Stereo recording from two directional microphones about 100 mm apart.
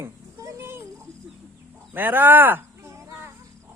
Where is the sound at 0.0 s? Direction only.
25° right (ahead or behind).